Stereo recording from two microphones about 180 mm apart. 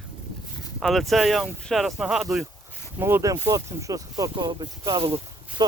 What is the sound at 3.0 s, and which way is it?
Speech, 15° right (ahead or behind).